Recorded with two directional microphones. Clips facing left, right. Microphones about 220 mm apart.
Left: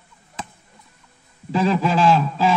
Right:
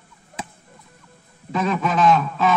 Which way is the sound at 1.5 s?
30° left (ahead or behind).